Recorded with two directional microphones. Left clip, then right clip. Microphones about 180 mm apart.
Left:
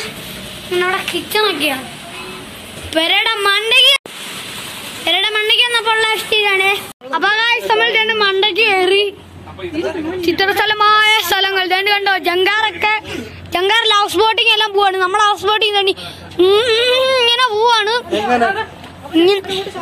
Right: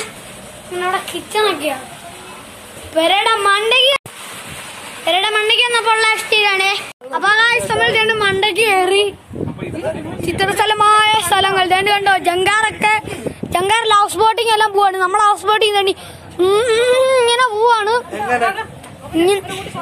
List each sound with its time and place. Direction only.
0.7 s a woman's voice: 10° right (ahead or behind)
2.9 s a woman's voice: centre (ahead or behind)
5.0 s a woman's voice: 10° left (ahead or behind)
10.2 s a woman's voice: 5° right (ahead or behind)
12.5 s a woman's voice: 20° right (ahead or behind); by 18.0 s centre (ahead or behind)
19.1 s a woman's voice: 20° right (ahead or behind)